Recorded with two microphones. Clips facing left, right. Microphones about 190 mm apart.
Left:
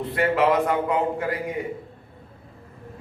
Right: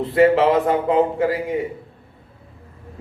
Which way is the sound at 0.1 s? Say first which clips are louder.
Right 6 dB; 25° right (ahead or behind).